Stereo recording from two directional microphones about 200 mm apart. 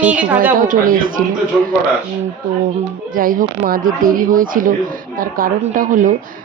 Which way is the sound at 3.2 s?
45° right (ahead or behind).